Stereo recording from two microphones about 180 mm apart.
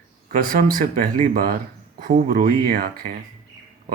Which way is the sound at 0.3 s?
55° right (ahead or behind).